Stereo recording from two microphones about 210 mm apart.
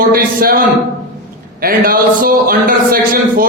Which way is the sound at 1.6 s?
45° right (ahead or behind).